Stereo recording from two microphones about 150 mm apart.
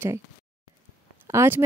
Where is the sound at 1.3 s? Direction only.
20° right (ahead or behind).